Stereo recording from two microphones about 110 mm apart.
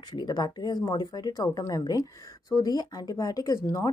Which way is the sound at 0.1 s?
40° left (ahead or behind).